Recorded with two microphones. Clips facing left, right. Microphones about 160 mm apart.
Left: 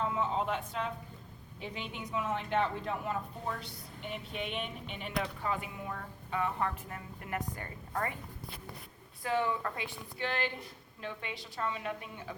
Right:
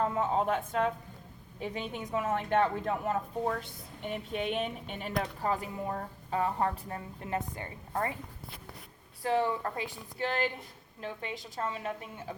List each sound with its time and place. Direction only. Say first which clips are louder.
0.0 s a woman's voice: right 4 dB; 50° right (ahead or behind); by 8.1 s 30° right (ahead or behind)
9.2 s speech: right 3 dB; 35° right (ahead or behind)